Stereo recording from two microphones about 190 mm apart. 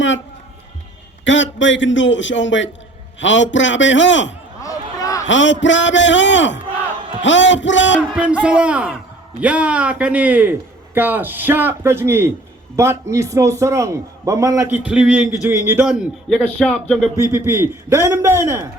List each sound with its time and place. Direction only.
1.2 s a man's voice: 75° left (ahead or behind)
4.6 s basketball bounce: 20° left (ahead or behind)
5.3 s a man's voice: 75° left (ahead or behind)
8.1 s a man's voice: 5° right (ahead or behind)
14.8 s a man's voice: 5° right (ahead or behind)
17.3 s a man's voice: 10° right (ahead or behind)